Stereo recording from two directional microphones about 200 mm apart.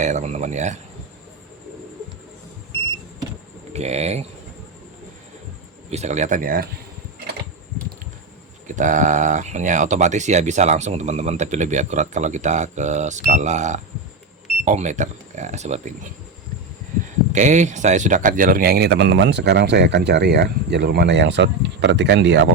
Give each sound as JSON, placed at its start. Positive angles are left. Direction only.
{"t": 0.0, "sound": "speech", "side_deg": -35}
{"t": 3.7, "sound": "speech", "side_deg": -35}
{"t": 5.9, "sound": "speech", "side_deg": -35}
{"t": 8.6, "sound": "speech", "side_deg": -40}
{"t": 17.3, "sound": "speech", "side_deg": -35}